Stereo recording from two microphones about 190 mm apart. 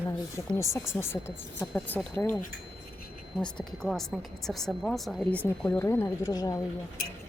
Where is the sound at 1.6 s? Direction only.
Centre (ahead or behind).